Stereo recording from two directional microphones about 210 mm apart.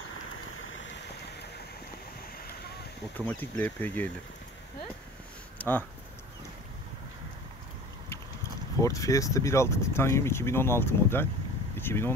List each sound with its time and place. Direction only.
0.3 s vehicle: 70° left (ahead or behind); by 1.5 s 55° left (ahead or behind)
3.2 s speech: 10° left (ahead or behind)
5.6 s speech: 10° left (ahead or behind)
8.7 s speech: 15° left (ahead or behind)